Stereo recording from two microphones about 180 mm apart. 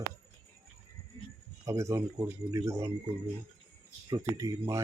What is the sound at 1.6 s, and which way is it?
Speech, 15° right (ahead or behind).